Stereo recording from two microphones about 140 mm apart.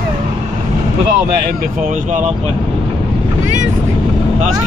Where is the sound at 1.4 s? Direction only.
70° right (ahead or behind).